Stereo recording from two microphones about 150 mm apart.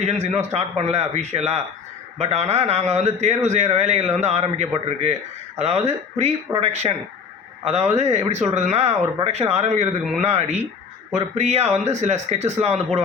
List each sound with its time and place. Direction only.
0.0 s a man's voice: 45° right (ahead or behind)